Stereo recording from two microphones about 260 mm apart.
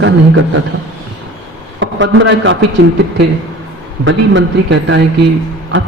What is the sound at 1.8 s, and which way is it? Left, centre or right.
Speech, right.